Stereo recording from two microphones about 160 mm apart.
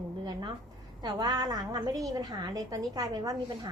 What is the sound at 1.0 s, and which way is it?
A woman's voice, 25° right (ahead or behind).